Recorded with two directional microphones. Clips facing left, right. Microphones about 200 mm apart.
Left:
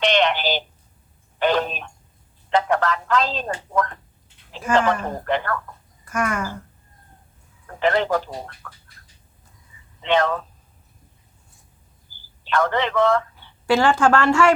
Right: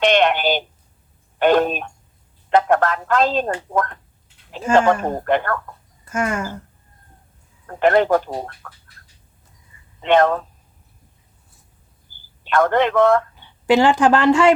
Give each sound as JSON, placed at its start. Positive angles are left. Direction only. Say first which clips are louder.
{"t": 0.0, "sound": "telephone", "louder": "right 4 dB", "side_deg": -50}
{"t": 1.4, "sound": "speech", "louder": "right 5 dB", "side_deg": -50}
{"t": 6.1, "sound": "speech", "louder": "right 2 dB", "side_deg": -25}
{"t": 7.8, "sound": "speech", "louder": "right 5 dB", "side_deg": -50}
{"t": 8.6, "sound": "duck", "louder": "right 1 dB", "side_deg": -40}
{"t": 10.0, "sound": "speech", "louder": "right 5 dB", "side_deg": -50}
{"t": 12.5, "sound": "speech", "louder": "right 5 dB", "side_deg": -50}
{"t": 13.3, "sound": "speech", "louder": "right 4 dB", "side_deg": -15}